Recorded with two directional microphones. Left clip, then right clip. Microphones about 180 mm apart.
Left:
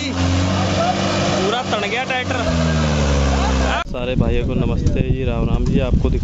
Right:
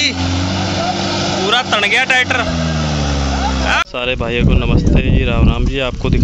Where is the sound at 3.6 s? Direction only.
Centre (ahead or behind).